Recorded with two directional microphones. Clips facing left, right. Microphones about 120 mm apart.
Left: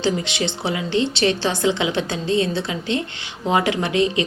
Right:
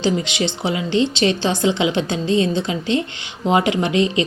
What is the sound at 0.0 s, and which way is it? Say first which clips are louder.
A woman's voice: right 2 dB; 20° right (ahead or behind).